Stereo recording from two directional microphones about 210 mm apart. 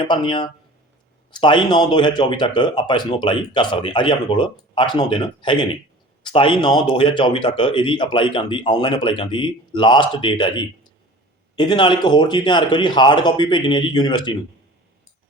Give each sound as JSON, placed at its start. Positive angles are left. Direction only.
{"t": 0.1, "sound": "speech", "side_deg": 25}